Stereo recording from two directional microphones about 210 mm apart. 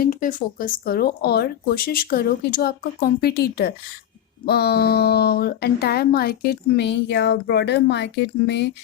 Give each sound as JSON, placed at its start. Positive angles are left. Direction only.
{"t": 0.0, "sound": "speech", "side_deg": 40}